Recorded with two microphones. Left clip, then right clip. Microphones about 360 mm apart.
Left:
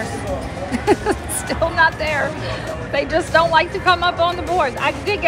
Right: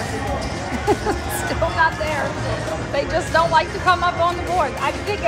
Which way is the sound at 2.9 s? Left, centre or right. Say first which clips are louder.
Left 3 dB; left.